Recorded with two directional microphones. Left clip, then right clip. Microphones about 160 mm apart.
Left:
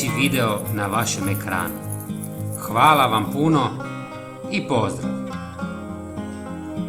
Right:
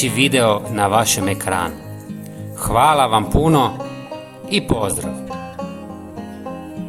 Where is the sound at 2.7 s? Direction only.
60° right (ahead or behind).